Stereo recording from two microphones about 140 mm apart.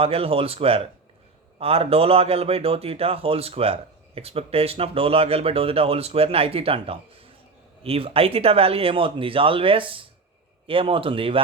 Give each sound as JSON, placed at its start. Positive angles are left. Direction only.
{"t": 0.0, "sound": "a man's voice", "side_deg": -45}